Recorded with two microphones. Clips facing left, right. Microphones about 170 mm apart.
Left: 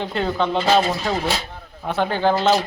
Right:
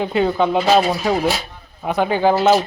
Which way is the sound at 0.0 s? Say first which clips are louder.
Right 5 dB; 5° right (ahead or behind).